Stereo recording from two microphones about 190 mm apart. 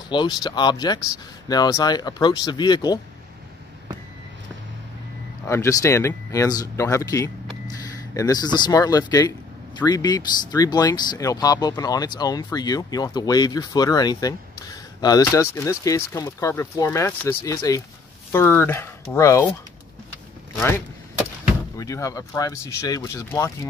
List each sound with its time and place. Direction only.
0.1 s speech: 25° left (ahead or behind)
5.5 s speech: 15° left (ahead or behind)
21.7 s speech: 15° left (ahead or behind)